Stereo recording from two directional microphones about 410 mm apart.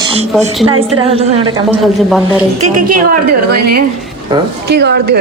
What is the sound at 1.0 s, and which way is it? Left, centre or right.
Speech, centre.